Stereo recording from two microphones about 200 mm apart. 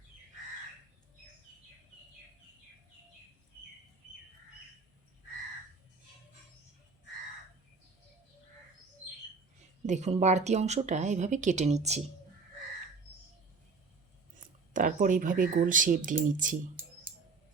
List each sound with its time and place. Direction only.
9.8 s speech: 35° right (ahead or behind)
14.7 s speech: 40° right (ahead or behind)